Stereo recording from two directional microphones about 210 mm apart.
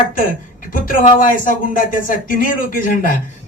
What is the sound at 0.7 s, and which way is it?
Speech, 40° left (ahead or behind).